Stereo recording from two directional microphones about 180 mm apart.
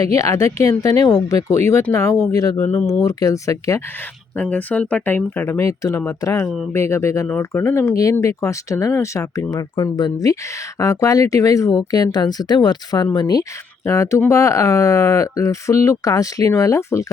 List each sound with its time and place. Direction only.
0.0 s a woman's voice: 20° left (ahead or behind)